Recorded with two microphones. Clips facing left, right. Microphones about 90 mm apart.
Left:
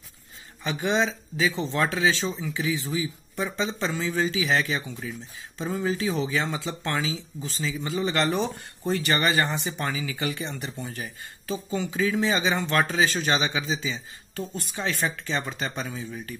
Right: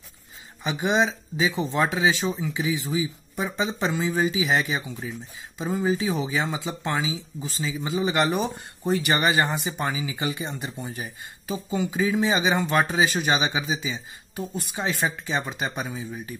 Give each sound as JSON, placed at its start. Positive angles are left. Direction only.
{"t": 0.7, "sound": "speech", "side_deg": -15}